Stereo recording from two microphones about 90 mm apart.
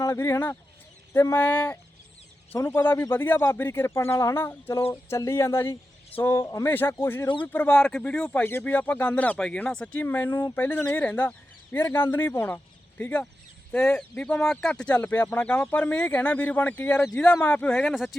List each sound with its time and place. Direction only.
0.0 s speech: 35° left (ahead or behind)
3.3 s speech: 35° left (ahead or behind); by 17.9 s 10° left (ahead or behind)
17.9 s speech: centre (ahead or behind)